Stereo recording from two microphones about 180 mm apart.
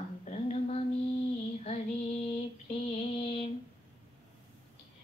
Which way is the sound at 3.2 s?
30° left (ahead or behind).